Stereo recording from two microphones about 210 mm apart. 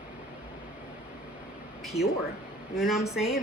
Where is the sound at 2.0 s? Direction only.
30° left (ahead or behind).